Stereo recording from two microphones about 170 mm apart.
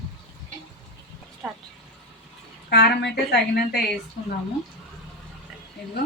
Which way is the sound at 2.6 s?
70° left (ahead or behind).